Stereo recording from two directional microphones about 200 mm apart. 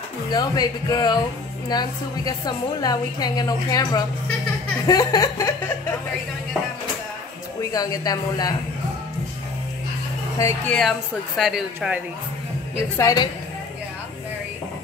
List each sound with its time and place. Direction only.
0.3 s a woman's voice: 20° left (ahead or behind)
7.7 s a woman's voice: 20° left (ahead or behind)
10.7 s speech: centre (ahead or behind)
12.9 s speech: 20° left (ahead or behind)